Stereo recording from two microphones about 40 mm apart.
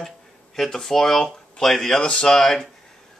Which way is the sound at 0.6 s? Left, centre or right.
Centre.